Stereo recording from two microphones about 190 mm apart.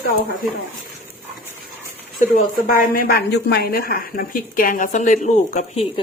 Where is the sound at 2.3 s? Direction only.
45° left (ahead or behind).